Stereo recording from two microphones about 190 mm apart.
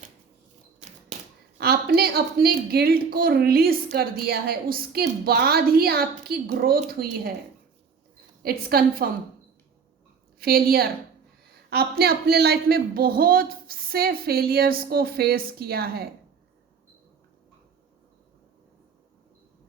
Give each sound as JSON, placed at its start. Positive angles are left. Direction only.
{"t": 1.5, "sound": "speech", "side_deg": -55}
{"t": 8.4, "sound": "a woman's voice", "side_deg": -55}
{"t": 10.4, "sound": "speech", "side_deg": -50}